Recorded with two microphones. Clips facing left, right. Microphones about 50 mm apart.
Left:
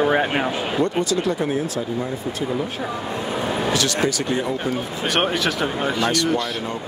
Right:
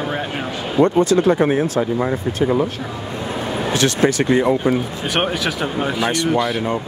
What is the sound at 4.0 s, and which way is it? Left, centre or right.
Speech, right.